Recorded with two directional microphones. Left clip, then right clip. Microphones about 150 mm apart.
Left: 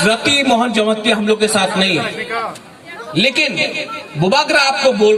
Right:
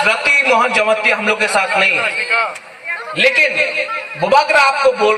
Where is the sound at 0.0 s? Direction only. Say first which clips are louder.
Right 2 dB; 45° right (ahead or behind).